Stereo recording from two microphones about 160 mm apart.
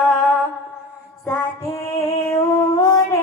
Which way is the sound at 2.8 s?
20° left (ahead or behind).